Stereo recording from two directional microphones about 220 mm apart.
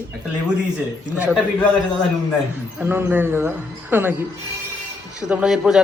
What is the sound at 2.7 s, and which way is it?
A man's voice, 10° right (ahead or behind).